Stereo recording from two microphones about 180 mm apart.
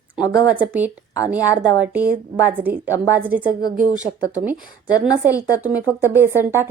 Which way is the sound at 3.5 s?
55° right (ahead or behind).